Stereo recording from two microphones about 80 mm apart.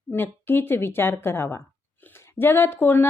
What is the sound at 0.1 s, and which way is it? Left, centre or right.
A woman's voice, left.